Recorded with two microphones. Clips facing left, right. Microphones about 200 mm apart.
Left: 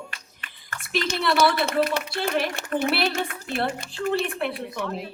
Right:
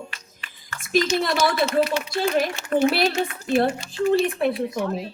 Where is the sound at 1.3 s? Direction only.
60° left (ahead or behind).